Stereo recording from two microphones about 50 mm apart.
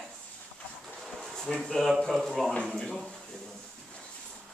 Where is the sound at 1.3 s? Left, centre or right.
Centre.